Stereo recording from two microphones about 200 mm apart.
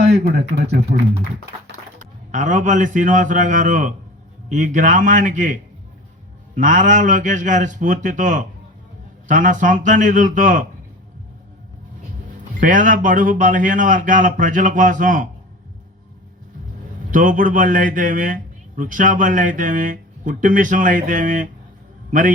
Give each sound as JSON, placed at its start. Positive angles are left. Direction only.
{"t": 0.1, "sound": "speech", "side_deg": -55}
{"t": 2.0, "sound": "speech", "side_deg": -40}
{"t": 6.6, "sound": "speech", "side_deg": -40}
{"t": 12.5, "sound": "speech", "side_deg": -40}
{"t": 17.1, "sound": "speech", "side_deg": -40}